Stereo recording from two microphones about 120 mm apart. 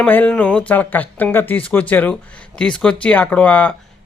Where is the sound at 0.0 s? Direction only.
15° left (ahead or behind).